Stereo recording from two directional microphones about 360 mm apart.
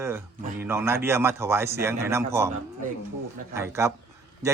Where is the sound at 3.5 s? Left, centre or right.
Centre.